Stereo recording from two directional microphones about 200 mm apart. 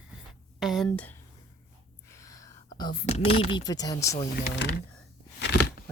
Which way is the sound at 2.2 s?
15° left (ahead or behind).